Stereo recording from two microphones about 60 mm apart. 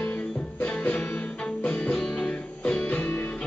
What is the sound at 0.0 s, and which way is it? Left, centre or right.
Music, left.